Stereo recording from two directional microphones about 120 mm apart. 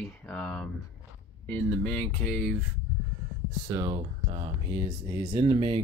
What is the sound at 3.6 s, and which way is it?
Speech, 30° right (ahead or behind).